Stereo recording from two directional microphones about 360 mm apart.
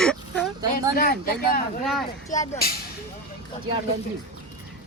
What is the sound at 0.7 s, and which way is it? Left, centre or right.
Speech, left.